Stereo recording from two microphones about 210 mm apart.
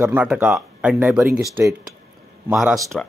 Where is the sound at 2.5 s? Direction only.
Centre (ahead or behind).